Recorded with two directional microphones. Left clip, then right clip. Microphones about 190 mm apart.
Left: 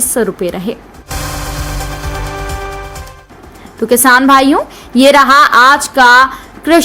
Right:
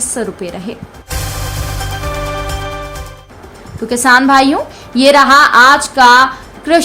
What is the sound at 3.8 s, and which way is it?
A woman's voice, 30° left (ahead or behind).